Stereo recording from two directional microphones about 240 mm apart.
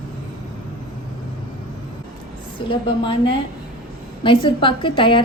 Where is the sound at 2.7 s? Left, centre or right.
Centre.